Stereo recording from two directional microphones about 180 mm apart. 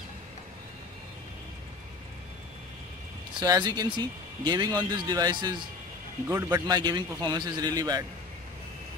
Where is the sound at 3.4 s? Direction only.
20° right (ahead or behind).